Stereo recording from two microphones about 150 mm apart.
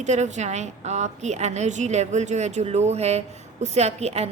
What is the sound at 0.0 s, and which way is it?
A woman's voice, 50° right (ahead or behind).